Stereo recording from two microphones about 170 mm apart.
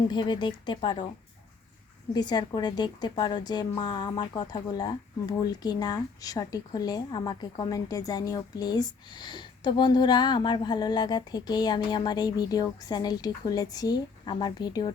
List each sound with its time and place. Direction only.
0.1 s a woman's voice: 25° left (ahead or behind)
2.1 s a woman's voice: 25° left (ahead or behind)